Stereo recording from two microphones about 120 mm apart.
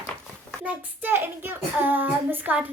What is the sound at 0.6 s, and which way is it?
A child's voice, 15° right (ahead or behind).